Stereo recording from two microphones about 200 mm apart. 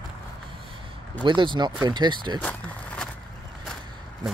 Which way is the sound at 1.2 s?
25° right (ahead or behind).